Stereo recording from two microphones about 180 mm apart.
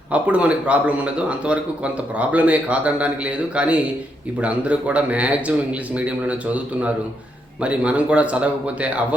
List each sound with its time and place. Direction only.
0.1 s a man's voice: 5° right (ahead or behind)